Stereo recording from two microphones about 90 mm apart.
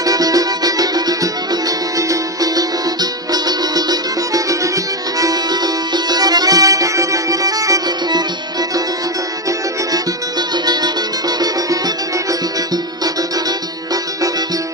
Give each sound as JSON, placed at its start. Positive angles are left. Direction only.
{"t": 0.0, "sound": "music", "side_deg": -45}
{"t": 10.5, "sound": "music", "side_deg": -50}